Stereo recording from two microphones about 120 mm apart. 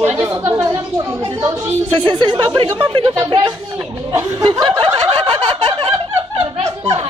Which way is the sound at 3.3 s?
40° right (ahead or behind).